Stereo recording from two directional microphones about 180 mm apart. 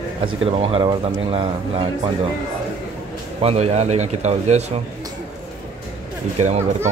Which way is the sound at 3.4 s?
35° right (ahead or behind).